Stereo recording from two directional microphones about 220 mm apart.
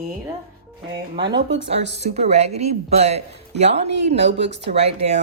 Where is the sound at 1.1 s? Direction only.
50° right (ahead or behind).